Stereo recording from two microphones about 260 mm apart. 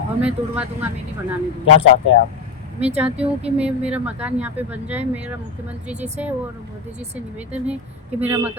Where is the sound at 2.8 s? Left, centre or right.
Right.